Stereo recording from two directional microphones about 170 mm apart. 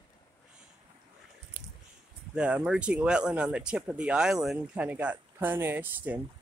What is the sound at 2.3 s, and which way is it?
Speech, 5° right (ahead or behind).